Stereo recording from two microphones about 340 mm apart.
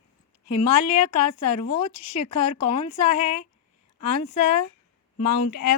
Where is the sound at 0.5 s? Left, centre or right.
Left.